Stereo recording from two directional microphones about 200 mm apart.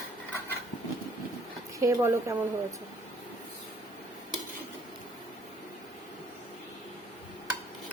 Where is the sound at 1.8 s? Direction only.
15° right (ahead or behind).